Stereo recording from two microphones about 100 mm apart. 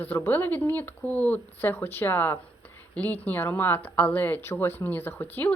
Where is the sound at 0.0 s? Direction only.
20° left (ahead or behind).